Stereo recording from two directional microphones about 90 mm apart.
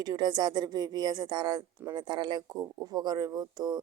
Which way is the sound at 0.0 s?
50° right (ahead or behind).